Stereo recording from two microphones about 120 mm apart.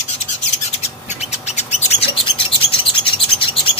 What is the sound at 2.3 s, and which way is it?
Bird, 50° left (ahead or behind).